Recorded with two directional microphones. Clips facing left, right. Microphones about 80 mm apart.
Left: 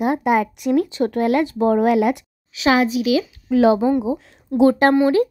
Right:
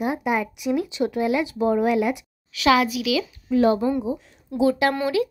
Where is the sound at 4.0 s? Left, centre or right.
Left.